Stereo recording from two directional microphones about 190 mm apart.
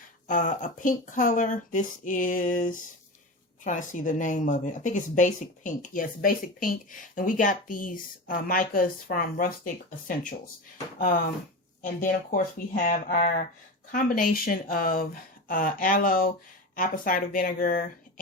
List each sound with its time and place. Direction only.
0.3 s a woman's voice: 45° left (ahead or behind)
11.8 s a woman's voice: 45° left (ahead or behind)